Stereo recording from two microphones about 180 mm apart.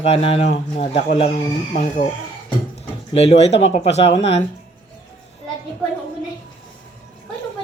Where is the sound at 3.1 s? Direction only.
35° left (ahead or behind).